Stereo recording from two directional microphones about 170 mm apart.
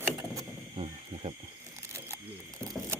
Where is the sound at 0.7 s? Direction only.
35° right (ahead or behind).